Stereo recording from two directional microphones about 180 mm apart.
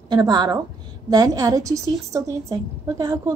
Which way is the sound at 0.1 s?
25° right (ahead or behind).